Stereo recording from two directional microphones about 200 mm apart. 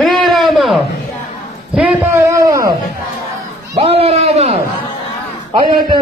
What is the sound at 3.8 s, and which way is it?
A man's voice, 30° right (ahead or behind).